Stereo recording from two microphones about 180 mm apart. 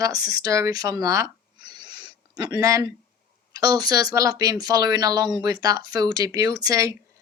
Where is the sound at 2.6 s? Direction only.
20° right (ahead or behind).